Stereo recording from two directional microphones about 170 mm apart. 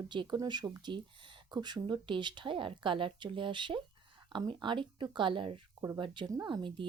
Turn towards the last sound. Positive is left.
turn(degrees=-30)  # may be behind; listen again after turning